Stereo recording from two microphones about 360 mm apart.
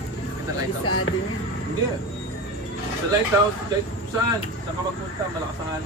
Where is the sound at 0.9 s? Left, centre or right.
Left.